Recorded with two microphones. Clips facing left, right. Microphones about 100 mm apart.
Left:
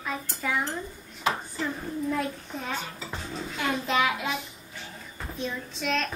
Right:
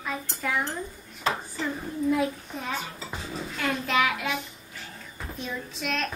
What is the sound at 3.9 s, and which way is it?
Speech, 30° left (ahead or behind).